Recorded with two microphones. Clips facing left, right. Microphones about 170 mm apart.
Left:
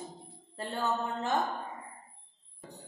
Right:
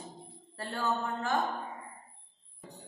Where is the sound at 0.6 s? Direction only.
20° left (ahead or behind).